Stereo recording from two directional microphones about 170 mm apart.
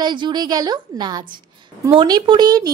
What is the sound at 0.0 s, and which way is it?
Speech, 25° right (ahead or behind).